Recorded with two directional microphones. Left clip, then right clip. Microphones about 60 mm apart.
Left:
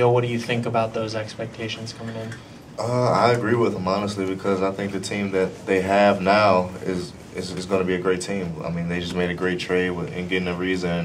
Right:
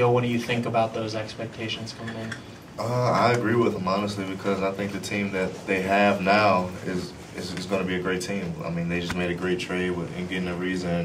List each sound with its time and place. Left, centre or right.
0.0 s speech: left
2.8 s speech: left